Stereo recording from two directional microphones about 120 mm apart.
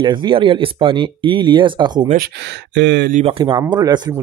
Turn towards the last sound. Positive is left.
turn(degrees=-35)  # may be behind; listen again after turning